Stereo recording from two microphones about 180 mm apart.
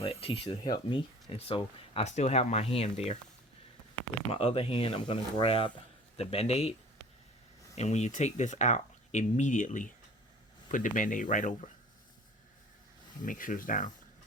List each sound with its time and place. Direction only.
0.0 s speech: 30° left (ahead or behind)
4.3 s speech: 35° left (ahead or behind)
7.8 s speech: 40° left (ahead or behind)
13.2 s speech: 45° left (ahead or behind)